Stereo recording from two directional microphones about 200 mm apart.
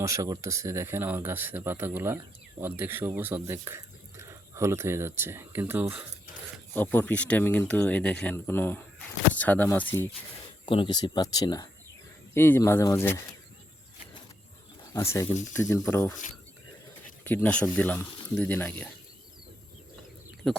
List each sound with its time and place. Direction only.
0.0 s speech: 15° right (ahead or behind)
6.7 s speech: 10° left (ahead or behind)
10.7 s speech: 25° left (ahead or behind)
14.9 s speech: 15° left (ahead or behind)
17.2 s speech: 10° left (ahead or behind)
20.4 s speech: centre (ahead or behind)